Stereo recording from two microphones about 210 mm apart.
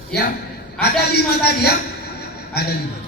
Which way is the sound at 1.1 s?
50° left (ahead or behind).